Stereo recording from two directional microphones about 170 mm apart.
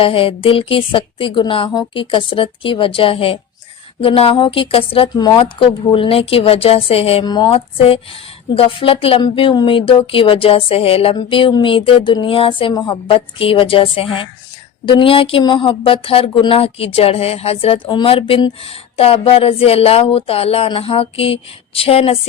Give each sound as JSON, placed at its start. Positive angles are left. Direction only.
{"t": 0.0, "sound": "speech", "side_deg": 30}